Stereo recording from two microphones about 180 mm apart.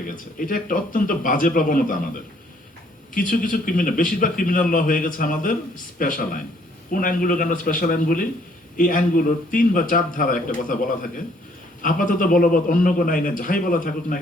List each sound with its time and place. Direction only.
0.1 s a man's voice: 50° left (ahead or behind)
3.2 s a man's voice: 50° left (ahead or behind)